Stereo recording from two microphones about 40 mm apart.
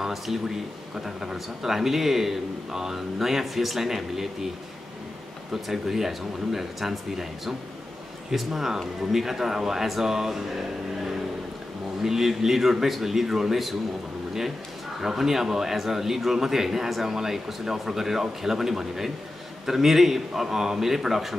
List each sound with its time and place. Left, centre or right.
0.0 s a man's voice: centre
5.5 s a man's voice: centre
12.0 s a man's voice: centre
15.0 s a man's voice: centre